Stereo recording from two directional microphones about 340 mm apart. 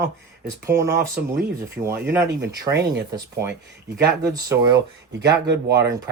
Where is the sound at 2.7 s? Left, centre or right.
Right.